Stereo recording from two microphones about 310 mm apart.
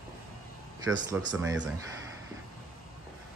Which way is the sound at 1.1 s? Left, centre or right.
Centre.